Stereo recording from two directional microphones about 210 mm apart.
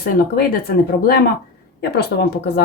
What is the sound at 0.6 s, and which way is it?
Speech, 50° left (ahead or behind).